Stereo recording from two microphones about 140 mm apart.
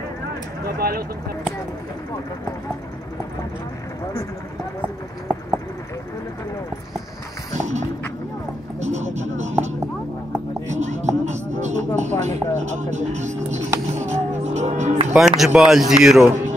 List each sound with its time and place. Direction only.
0.7 s speech: 90° right
7.5 s clip-clop: 55° right (ahead or behind)
8.7 s speech: 55° right (ahead or behind)
10.7 s speech: 55° right (ahead or behind)
15.1 s speech: centre (ahead or behind)